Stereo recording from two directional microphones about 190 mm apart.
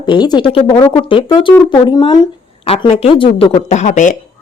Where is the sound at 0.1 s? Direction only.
25° left (ahead or behind).